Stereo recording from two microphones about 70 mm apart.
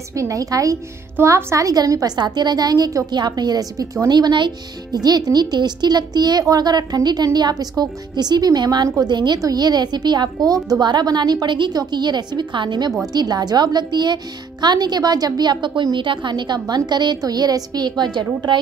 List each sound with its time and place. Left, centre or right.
0.1 s a woman's voice: right
2.1 s speech: right
3.1 s speech: right
4.1 s a woman's voice: right
4.9 s a woman's voice: right
9.0 s a woman's voice: right
9.4 s a woman's voice: right
13.1 s a woman's voice: right